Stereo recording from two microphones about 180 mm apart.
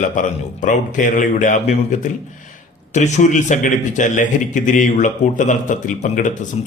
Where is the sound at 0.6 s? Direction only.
45° left (ahead or behind).